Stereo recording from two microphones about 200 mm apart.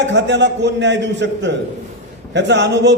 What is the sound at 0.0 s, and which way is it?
A man's voice, 65° right (ahead or behind).